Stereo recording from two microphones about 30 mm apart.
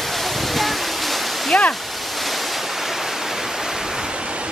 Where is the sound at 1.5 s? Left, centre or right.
Left.